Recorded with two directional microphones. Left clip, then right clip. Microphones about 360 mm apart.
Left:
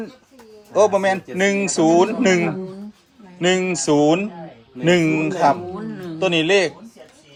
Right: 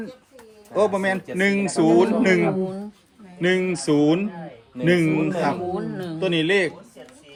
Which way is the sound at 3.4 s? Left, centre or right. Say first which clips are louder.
Left 3 dB; centre.